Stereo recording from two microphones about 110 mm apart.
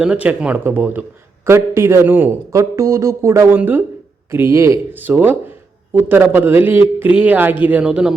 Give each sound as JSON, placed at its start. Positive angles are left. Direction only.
{"t": 0.0, "sound": "speech", "side_deg": -10}